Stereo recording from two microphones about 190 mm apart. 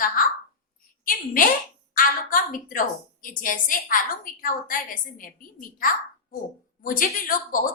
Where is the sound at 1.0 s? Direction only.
50° left (ahead or behind).